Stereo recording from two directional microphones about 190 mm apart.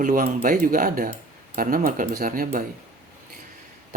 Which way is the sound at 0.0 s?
50° right (ahead or behind).